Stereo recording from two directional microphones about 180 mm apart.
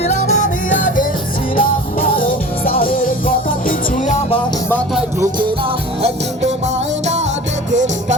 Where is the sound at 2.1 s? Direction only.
50° left (ahead or behind).